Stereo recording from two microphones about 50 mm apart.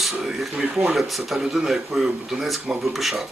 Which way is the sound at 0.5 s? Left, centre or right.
Centre.